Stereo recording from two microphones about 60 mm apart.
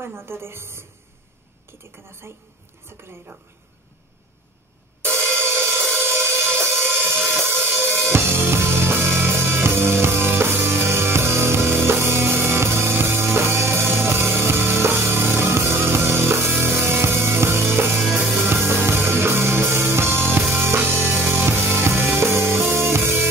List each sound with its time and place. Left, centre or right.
0.0 s a woman's voice: right
2.0 s a woman's voice: right
5.0 s music: right
7.6 s drum kit: right
8.1 s music: right